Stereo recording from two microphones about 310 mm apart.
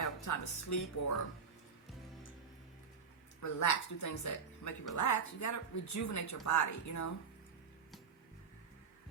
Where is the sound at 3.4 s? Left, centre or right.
Left.